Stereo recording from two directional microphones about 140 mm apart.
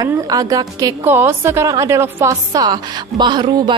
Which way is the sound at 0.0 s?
25° right (ahead or behind).